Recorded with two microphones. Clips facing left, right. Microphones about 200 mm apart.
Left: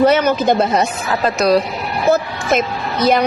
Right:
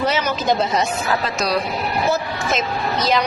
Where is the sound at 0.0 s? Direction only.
55° left (ahead or behind).